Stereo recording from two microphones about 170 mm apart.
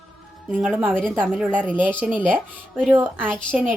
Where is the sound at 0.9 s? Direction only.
5° left (ahead or behind).